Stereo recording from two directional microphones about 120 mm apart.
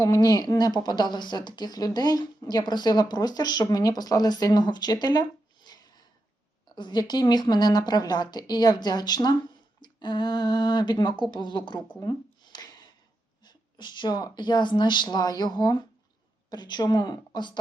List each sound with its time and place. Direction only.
0.0 s a woman's voice: 30° left (ahead or behind)
11.9 s a sound: 35° left (ahead or behind)
13.4 s a woman's voice: 40° left (ahead or behind)